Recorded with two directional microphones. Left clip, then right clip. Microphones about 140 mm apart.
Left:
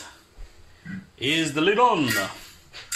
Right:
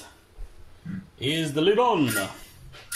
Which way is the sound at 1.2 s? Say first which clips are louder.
Left 2 dB; 20° right (ahead or behind).